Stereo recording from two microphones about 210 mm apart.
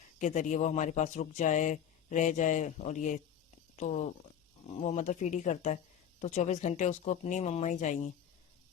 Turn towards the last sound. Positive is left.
turn(degrees=35)  # may be behind; listen again after turning